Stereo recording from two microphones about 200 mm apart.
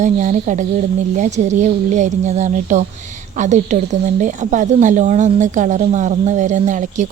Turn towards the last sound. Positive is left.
turn(degrees=-40)  # may be behind; listen again after turning